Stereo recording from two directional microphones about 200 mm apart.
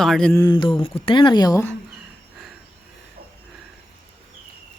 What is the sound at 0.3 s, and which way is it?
Speech, 20° left (ahead or behind).